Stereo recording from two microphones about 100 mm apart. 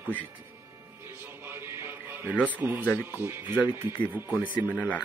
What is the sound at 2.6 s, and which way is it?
Speech, 15° right (ahead or behind).